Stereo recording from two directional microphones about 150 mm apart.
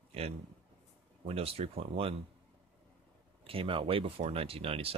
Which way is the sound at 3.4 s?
35° right (ahead or behind).